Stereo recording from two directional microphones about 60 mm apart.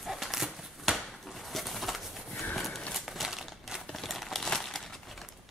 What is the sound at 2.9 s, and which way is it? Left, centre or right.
Crumpling, centre.